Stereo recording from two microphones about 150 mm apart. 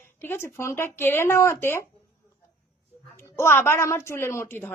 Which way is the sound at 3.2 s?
15° left (ahead or behind).